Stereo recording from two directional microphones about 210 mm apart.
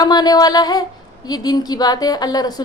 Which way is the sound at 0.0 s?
20° left (ahead or behind).